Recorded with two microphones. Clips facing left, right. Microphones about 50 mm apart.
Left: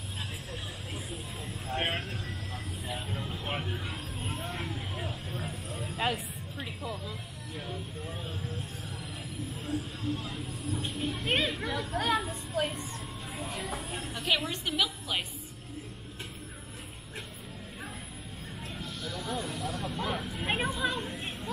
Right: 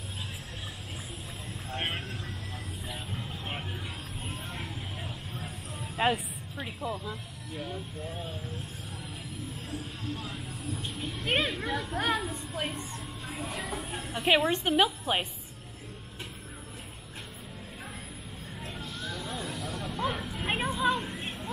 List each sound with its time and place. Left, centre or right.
1.7 s vehicle: left
3.2 s vehicle: centre
4.2 s vehicle: left
4.5 s vehicle: centre
5.4 s vehicle: left
5.9 s speech: right
9.7 s speech: left
11.2 s speech: right
13.4 s a sound: right
13.7 s speech: right
18.8 s a sound: right
19.9 s vehicle: right
20.3 s a sound: centre